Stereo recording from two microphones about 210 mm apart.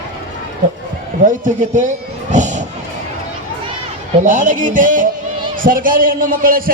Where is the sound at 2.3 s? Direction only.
35° right (ahead or behind).